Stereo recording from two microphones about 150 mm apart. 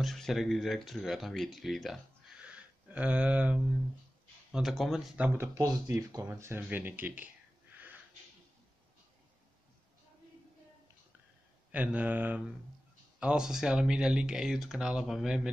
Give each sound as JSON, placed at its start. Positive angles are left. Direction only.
{"t": 0.0, "sound": "speech", "side_deg": 0}
{"t": 5.5, "sound": "speech", "side_deg": -20}
{"t": 7.7, "sound": "a sound", "side_deg": -10}
{"t": 11.7, "sound": "speech", "side_deg": -10}